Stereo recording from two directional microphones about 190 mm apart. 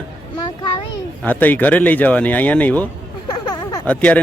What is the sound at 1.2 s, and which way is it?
Speech, 10° left (ahead or behind).